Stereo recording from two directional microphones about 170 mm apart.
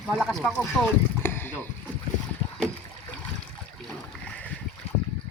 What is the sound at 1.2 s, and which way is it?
Rowboat, 15° left (ahead or behind).